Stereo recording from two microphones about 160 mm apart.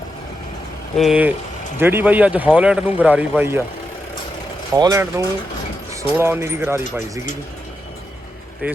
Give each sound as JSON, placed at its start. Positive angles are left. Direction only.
{"t": 0.9, "sound": "speech", "side_deg": 0}
{"t": 1.8, "sound": "a man's voice", "side_deg": -15}
{"t": 4.7, "sound": "a man's voice", "side_deg": -20}
{"t": 8.6, "sound": "a man's voice", "side_deg": -10}